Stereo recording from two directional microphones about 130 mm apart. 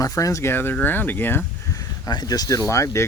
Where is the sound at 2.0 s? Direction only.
30° left (ahead or behind).